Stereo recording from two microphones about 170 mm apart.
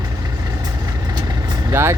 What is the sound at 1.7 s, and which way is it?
Speech, 15° right (ahead or behind).